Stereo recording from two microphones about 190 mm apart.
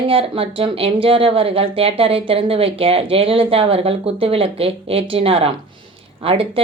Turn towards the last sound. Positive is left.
turn(degrees=-30)  # may be behind; listen again after turning